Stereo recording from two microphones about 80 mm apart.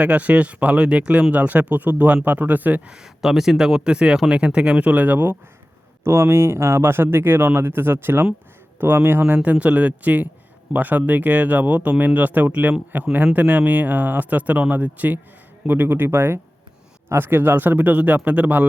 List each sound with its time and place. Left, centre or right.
0.0 s speech: centre